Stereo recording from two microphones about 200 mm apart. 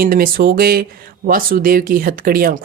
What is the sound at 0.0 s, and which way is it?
Speech, 45° right (ahead or behind).